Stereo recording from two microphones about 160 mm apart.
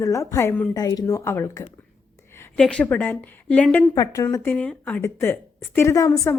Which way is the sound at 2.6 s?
5° left (ahead or behind).